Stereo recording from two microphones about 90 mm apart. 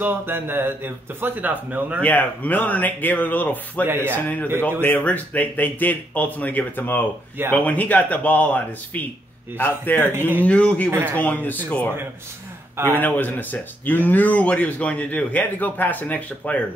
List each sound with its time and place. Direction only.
0.0 s speech: 25° right (ahead or behind)
2.0 s speech: 20° left (ahead or behind)
3.8 s speech: 25° right (ahead or behind)
4.8 s speech: 20° left (ahead or behind)
10.1 s speech: 25° right (ahead or behind)
10.4 s speech: 15° left (ahead or behind)
12.9 s speech: 20° left (ahead or behind)